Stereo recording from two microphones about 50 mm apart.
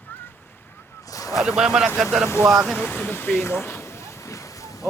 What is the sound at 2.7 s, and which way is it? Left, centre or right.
Speech, left.